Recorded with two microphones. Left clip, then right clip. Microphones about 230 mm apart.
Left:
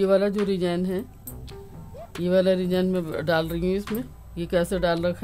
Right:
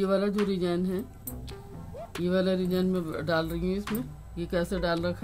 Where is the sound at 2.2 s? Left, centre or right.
Left.